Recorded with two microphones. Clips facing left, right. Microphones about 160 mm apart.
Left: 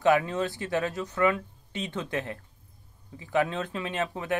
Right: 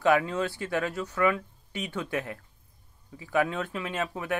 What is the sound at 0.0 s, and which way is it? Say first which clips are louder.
Speech: left 1 dB; 20° left (ahead or behind).